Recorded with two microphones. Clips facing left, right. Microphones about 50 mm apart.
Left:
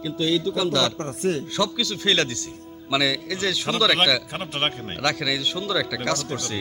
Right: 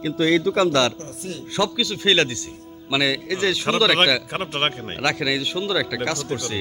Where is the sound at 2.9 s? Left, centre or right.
Centre.